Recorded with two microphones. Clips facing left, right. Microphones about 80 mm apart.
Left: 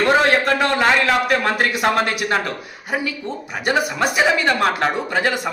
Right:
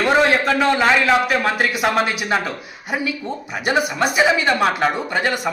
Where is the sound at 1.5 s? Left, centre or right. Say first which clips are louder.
Even; centre.